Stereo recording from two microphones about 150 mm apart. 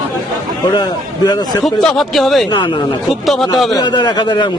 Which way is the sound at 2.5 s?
30° left (ahead or behind).